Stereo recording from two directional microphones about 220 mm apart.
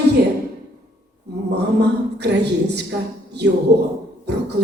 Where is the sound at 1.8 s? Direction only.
50° right (ahead or behind).